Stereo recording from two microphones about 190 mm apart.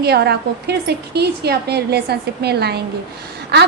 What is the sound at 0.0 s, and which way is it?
A woman's voice, 60° right (ahead or behind).